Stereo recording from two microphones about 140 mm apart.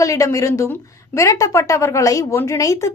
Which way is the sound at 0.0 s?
20° left (ahead or behind).